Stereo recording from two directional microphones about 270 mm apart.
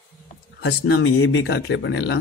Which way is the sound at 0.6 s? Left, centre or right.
Left.